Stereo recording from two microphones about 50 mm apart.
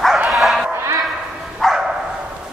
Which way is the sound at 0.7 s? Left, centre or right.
Right.